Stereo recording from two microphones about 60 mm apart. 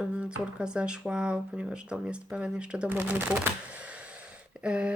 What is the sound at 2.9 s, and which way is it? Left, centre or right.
Speech, right.